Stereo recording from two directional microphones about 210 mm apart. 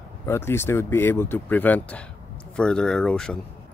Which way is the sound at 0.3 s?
10° left (ahead or behind).